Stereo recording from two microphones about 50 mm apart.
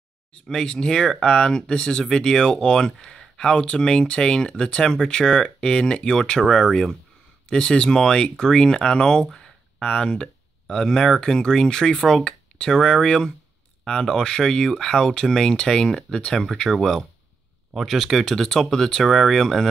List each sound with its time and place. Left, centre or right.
0.5 s speech: centre
16.7 s speech: centre